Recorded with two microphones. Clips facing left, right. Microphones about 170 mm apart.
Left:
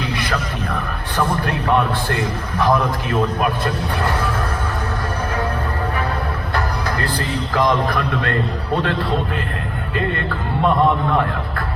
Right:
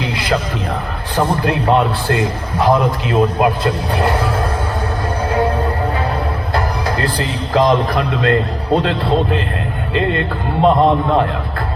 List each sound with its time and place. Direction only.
1.1 s a man's voice: 20° right (ahead or behind)
7.0 s a man's voice: 20° right (ahead or behind)